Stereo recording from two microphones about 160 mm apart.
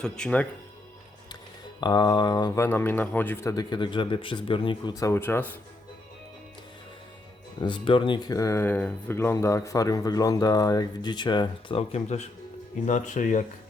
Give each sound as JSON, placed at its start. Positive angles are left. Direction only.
{"t": 0.0, "sound": "speech", "side_deg": 5}
{"t": 1.8, "sound": "speech", "side_deg": 25}
{"t": 2.6, "sound": "speech", "side_deg": 15}
{"t": 7.6, "sound": "speech", "side_deg": 30}